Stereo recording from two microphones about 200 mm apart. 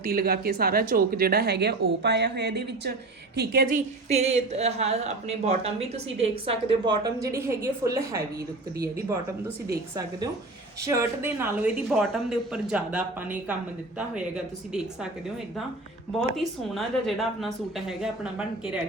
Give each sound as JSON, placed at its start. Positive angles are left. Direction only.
{"t": 0.0, "sound": "speech", "side_deg": -50}
{"t": 4.1, "sound": "a woman's voice", "side_deg": -30}
{"t": 10.8, "sound": "a woman's voice", "side_deg": -15}
{"t": 16.4, "sound": "a woman's voice", "side_deg": 0}